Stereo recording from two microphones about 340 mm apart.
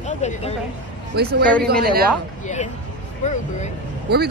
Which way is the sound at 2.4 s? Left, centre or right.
Centre.